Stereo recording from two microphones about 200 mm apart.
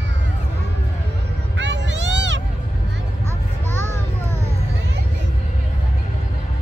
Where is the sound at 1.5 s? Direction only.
65° right (ahead or behind).